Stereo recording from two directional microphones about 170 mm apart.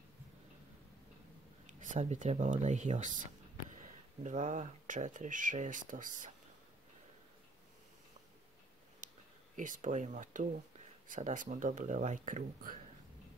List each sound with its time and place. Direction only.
1.7 s speech: 50° right (ahead or behind)
4.2 s speech: 45° right (ahead or behind)
9.6 s speech: 50° right (ahead or behind)